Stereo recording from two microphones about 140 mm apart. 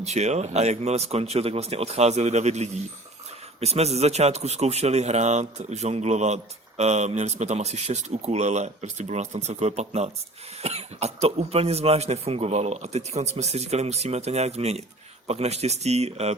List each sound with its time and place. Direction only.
0.0 s speech: 55° right (ahead or behind)